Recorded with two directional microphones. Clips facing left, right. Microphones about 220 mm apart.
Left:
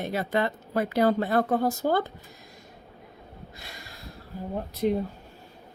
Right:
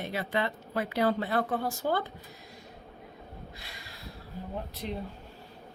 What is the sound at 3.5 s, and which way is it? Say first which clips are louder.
Snort: left 3 dB; 45° left (ahead or behind).